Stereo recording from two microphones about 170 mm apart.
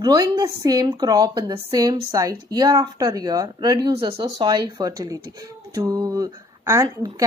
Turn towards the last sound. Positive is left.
turn(degrees=-20)  # may be behind; listen again after turning